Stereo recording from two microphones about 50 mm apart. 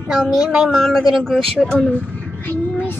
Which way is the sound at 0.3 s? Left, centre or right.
Centre.